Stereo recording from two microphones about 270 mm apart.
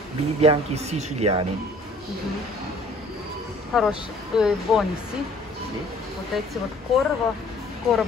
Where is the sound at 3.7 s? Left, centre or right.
Centre.